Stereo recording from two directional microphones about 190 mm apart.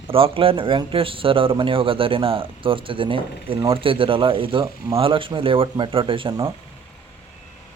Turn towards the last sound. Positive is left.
turn(degrees=-25)  # may be behind; listen again after turning